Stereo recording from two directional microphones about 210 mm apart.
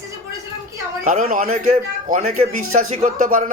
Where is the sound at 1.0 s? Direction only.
40° right (ahead or behind).